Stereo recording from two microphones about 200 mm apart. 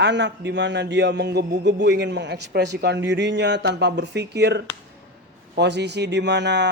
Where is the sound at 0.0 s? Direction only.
60° right (ahead or behind).